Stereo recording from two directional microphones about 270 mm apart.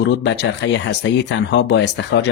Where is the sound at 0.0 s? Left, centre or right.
Left.